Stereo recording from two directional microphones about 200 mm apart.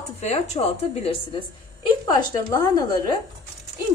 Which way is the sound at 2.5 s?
20° left (ahead or behind).